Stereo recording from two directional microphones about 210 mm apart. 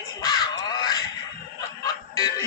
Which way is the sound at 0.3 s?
20° left (ahead or behind).